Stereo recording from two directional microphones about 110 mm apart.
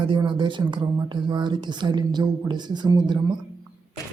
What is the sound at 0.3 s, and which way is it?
Speech, 45° right (ahead or behind).